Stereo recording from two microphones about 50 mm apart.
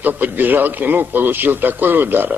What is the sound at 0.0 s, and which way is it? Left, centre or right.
A man's voice, right.